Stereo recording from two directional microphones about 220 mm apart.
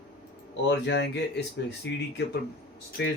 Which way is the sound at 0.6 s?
55° left (ahead or behind).